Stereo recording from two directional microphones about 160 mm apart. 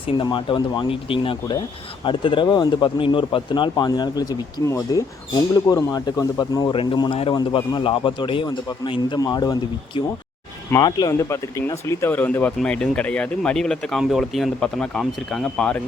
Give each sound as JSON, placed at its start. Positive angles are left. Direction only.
{"t": 0.2, "sound": "speech", "side_deg": 30}